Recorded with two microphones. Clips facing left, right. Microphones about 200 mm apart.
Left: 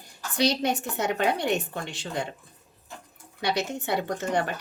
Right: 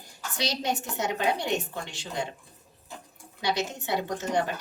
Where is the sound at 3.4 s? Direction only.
60° left (ahead or behind).